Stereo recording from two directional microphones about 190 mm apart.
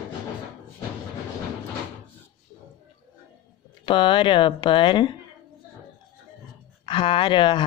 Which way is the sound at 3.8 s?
25° left (ahead or behind).